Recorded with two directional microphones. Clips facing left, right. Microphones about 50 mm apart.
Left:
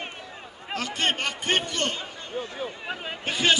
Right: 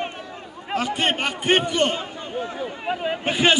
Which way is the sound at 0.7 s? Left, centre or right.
Centre.